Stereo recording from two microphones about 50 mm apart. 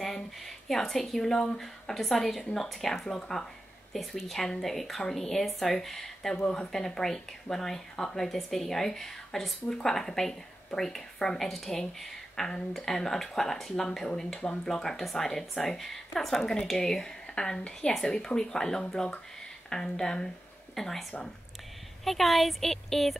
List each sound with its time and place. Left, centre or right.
0.0 s a woman's voice: centre
6.3 s speech: centre
6.7 s speech: centre
14.4 s speech: left
14.7 s speech: centre
17.6 s a woman's voice: left; by 21.0 s centre
22.0 s a woman's voice: centre